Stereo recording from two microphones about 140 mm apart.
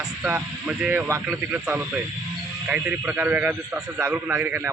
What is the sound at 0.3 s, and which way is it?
A man's voice, 15° right (ahead or behind).